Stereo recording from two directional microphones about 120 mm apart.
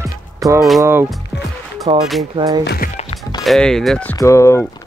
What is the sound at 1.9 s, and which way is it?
Speech, 45° right (ahead or behind).